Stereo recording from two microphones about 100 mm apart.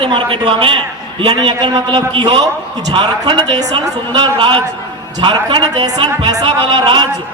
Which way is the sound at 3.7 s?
55° right (ahead or behind).